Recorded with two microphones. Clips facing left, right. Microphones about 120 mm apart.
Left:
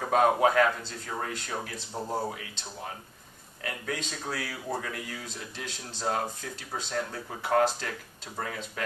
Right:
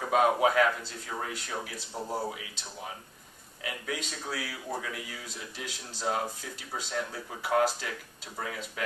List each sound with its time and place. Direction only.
0.0 s a sound: 5° right (ahead or behind)
0.4 s speech: 5° right (ahead or behind)
2.0 s speech: 15° left (ahead or behind)
2.2 s a man's voice: 5° right (ahead or behind)